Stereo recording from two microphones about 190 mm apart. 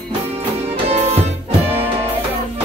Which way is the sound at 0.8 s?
35° right (ahead or behind).